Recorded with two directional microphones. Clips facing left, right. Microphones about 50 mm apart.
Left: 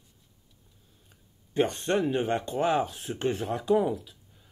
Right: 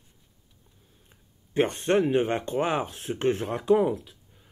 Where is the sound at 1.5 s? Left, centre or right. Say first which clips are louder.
Right 3 dB; right.